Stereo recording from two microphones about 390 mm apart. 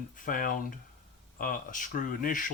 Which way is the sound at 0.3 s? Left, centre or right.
Left.